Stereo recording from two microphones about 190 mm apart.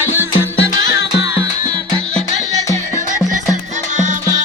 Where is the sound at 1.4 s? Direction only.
20° right (ahead or behind).